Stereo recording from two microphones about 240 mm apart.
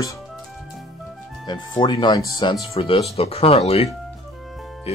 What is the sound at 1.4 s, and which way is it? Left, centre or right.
Speech, centre.